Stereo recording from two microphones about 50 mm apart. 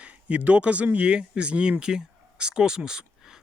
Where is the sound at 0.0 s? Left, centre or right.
Right.